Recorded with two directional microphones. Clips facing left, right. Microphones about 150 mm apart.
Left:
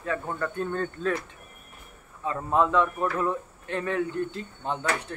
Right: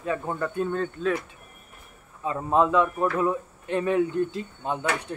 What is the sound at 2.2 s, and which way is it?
Speech, 20° right (ahead or behind).